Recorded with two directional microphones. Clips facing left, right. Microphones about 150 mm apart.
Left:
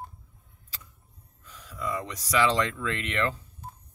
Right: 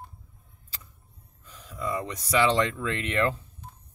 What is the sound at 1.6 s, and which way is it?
Speech, 30° right (ahead or behind).